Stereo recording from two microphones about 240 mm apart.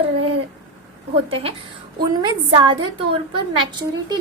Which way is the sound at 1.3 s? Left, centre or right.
Right.